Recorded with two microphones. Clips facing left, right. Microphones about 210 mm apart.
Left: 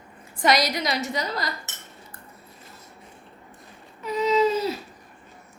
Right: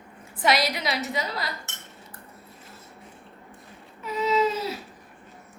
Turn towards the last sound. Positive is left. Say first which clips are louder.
# left 3 dB
turn(degrees=0)  # may be behind; listen again after turning